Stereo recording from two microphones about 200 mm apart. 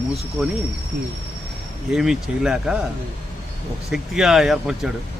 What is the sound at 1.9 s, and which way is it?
Speech, 5° right (ahead or behind).